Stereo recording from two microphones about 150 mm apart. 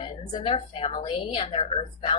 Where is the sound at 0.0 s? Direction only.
40° left (ahead or behind).